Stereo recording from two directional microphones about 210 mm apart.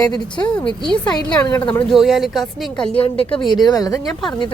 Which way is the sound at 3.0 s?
25° left (ahead or behind).